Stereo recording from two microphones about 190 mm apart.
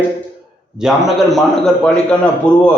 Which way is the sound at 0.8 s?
Centre (ahead or behind).